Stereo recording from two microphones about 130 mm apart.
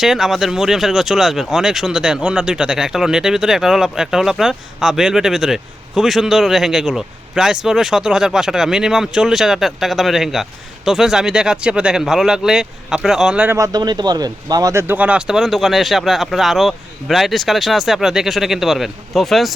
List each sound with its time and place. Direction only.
0.0 s speech: 5° right (ahead or behind)
13.6 s speech: 30° right (ahead or behind); by 19.5 s centre (ahead or behind)